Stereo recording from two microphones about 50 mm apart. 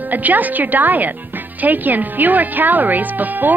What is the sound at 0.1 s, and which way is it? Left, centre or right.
Speech, right.